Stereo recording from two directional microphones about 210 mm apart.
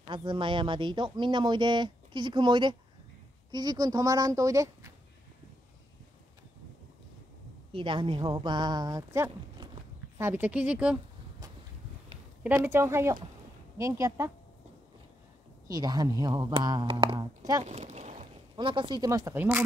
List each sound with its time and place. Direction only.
0.1 s speech: 25° right (ahead or behind)
7.7 s speech: 25° right (ahead or behind); by 11.0 s 5° right (ahead or behind)
12.4 s speech: 10° right (ahead or behind)
15.7 s speech: 20° right (ahead or behind)
17.6 s speech: 30° right (ahead or behind); by 19.6 s 10° right (ahead or behind)